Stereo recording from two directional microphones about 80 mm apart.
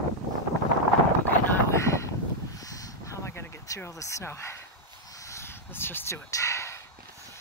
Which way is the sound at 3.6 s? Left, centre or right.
Left.